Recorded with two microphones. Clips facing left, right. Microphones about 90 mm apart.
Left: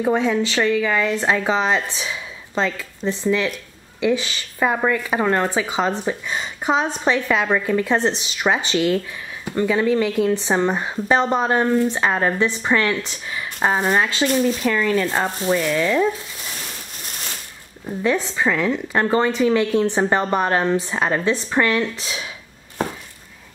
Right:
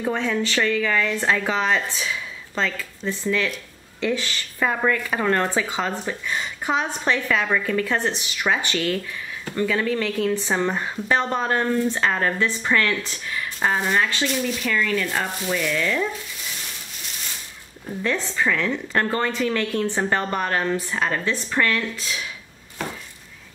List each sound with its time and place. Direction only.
0.0 s speech: 15° left (ahead or behind)
14.2 s speech: 35° left (ahead or behind)
18.0 s speech: 15° left (ahead or behind)